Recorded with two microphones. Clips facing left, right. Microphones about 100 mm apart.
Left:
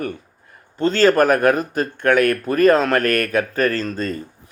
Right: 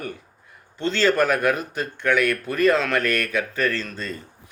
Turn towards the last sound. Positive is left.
turn(degrees=45)  # may be behind; listen again after turning